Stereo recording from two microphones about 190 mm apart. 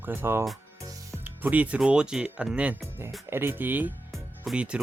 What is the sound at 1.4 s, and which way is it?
Speech, 10° right (ahead or behind).